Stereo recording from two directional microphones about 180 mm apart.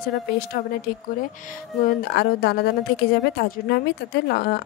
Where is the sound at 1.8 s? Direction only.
55° left (ahead or behind).